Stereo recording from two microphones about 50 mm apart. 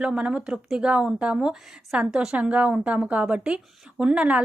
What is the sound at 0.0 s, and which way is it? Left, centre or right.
A woman's voice, centre.